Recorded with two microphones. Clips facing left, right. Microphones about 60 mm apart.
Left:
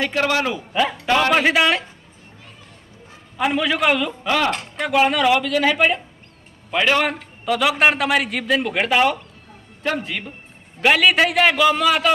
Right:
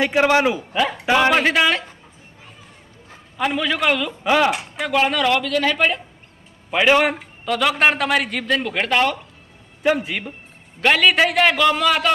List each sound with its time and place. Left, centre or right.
0.0 s a man's voice: centre
0.7 s speech: centre
1.0 s speech: centre
1.3 s a man's voice: centre
3.3 s a man's voice: centre
4.2 s speech: centre
4.9 s a man's voice: centre
6.7 s a man's voice: centre
7.4 s a man's voice: centre
9.8 s a man's voice: centre